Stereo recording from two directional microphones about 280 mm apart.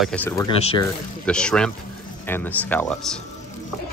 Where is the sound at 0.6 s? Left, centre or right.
Centre.